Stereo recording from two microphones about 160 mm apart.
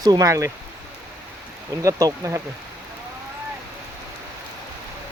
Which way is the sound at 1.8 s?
20° right (ahead or behind).